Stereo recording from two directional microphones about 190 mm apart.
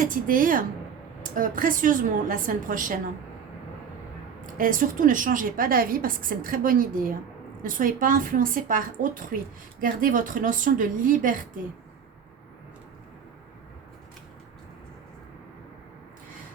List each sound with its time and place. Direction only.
0.0 s a woman's voice: 45° right (ahead or behind)
4.5 s a woman's voice: 45° right (ahead or behind)